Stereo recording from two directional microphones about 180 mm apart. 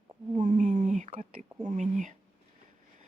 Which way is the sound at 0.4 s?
45° right (ahead or behind).